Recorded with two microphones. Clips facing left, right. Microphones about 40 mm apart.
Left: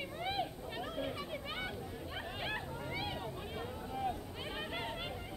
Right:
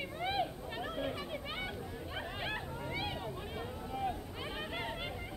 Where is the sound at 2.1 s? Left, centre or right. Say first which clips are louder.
Right 1 dB; centre.